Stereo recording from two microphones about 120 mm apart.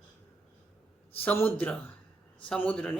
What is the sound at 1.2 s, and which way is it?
Speech, 15° left (ahead or behind).